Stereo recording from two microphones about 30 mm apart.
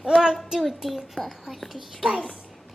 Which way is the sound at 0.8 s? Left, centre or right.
Centre.